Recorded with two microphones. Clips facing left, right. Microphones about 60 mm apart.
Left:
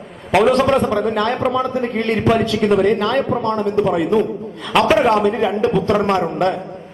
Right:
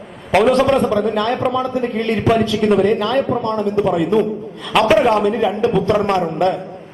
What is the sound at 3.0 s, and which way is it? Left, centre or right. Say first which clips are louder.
Speech: even; left.